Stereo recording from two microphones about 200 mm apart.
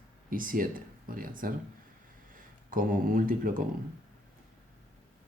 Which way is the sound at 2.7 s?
45° right (ahead or behind).